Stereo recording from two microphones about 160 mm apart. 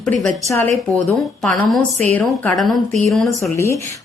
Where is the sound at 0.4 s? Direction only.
20° left (ahead or behind).